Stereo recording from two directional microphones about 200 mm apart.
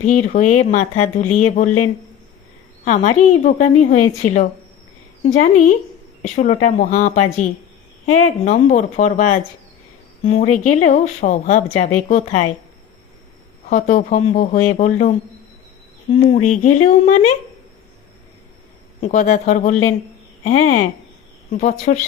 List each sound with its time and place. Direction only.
0.0 s speech: 35° left (ahead or behind)
2.8 s speech: 35° left (ahead or behind)
13.7 s speech: 35° left (ahead or behind)
16.3 s speech: 35° left (ahead or behind)
19.0 s speech: 35° left (ahead or behind)